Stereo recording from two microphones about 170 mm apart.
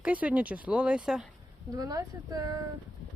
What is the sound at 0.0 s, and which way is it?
Speech, 10° right (ahead or behind).